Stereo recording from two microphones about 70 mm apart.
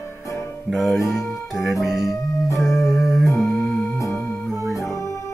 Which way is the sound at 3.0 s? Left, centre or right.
Centre.